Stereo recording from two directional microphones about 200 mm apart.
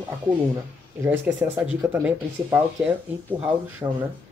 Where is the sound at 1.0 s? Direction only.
10° right (ahead or behind).